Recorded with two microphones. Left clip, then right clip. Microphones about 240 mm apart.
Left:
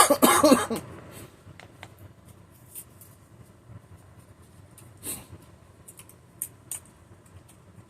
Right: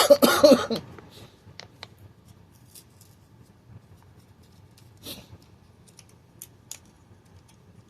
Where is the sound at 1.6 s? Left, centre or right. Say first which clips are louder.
Right 4 dB; right.